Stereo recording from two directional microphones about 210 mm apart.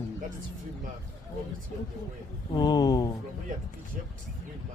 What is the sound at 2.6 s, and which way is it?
Speech, 20° left (ahead or behind).